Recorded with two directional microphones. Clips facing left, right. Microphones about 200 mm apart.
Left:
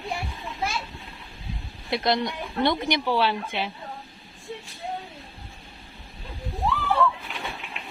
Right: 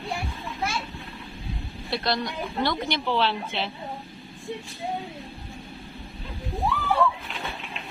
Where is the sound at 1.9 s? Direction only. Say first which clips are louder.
Left 3 dB; 20° left (ahead or behind).